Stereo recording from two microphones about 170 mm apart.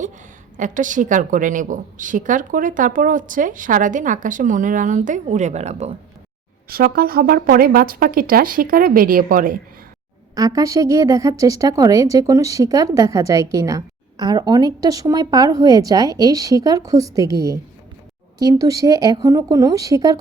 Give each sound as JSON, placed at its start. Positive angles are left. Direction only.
{"t": 0.5, "sound": "a woman's voice", "side_deg": -50}
{"t": 6.7, "sound": "a woman's voice", "side_deg": -60}
{"t": 10.3, "sound": "a woman's voice", "side_deg": -20}